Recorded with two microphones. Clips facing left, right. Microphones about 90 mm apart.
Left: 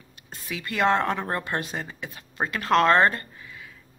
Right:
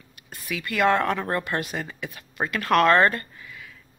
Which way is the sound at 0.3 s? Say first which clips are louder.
Right 2 dB; 25° left (ahead or behind).